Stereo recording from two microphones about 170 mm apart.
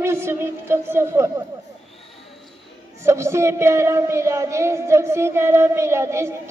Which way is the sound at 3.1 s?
15° right (ahead or behind).